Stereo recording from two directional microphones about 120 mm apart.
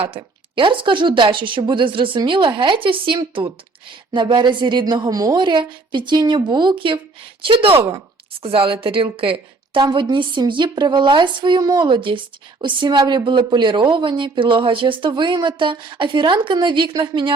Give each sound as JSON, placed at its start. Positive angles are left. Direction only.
{"t": 0.0, "sound": "a woman's voice", "side_deg": -45}